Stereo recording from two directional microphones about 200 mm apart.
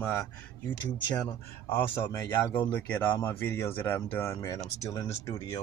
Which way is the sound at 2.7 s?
10° left (ahead or behind).